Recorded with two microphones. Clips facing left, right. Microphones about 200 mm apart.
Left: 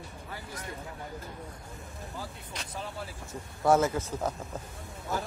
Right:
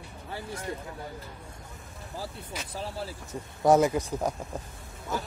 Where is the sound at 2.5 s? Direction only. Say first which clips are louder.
Right 3 dB; 5° right (ahead or behind).